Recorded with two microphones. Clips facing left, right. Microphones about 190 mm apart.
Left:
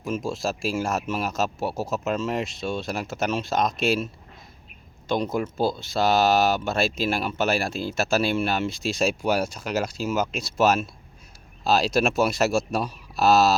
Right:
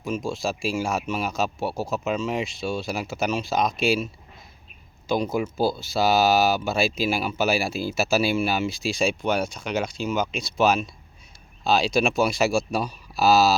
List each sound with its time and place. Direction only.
0.0 s speech: 5° left (ahead or behind)